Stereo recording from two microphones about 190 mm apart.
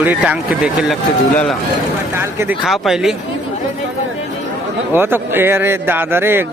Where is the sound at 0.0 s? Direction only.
10° right (ahead or behind).